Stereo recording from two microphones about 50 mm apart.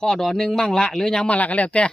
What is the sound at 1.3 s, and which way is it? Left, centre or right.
Speech, left.